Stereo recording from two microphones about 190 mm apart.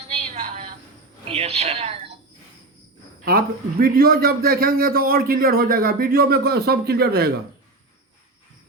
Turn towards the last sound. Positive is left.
turn(degrees=-55)  # may be behind; listen again after turning